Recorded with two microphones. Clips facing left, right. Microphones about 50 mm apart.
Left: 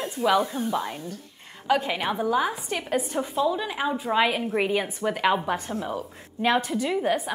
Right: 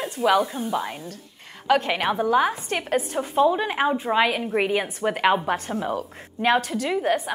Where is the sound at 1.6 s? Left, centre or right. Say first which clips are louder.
Right 3 dB; right.